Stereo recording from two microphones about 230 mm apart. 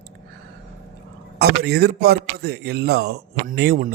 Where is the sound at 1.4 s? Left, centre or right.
Right.